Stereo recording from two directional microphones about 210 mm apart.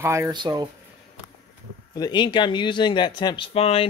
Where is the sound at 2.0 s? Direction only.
20° left (ahead or behind).